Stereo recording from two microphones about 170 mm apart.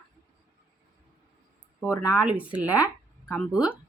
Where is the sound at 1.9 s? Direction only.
20° left (ahead or behind).